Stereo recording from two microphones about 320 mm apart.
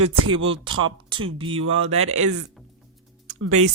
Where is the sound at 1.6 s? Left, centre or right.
Right.